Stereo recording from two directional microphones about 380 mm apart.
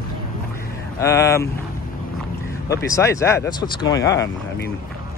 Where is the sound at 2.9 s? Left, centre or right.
Centre.